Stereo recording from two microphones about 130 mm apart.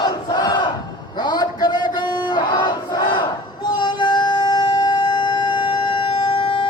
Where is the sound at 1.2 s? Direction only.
35° left (ahead or behind).